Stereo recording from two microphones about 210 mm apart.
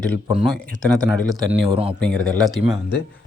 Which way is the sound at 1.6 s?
25° right (ahead or behind).